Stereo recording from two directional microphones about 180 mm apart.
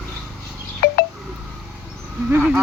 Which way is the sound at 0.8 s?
60° left (ahead or behind).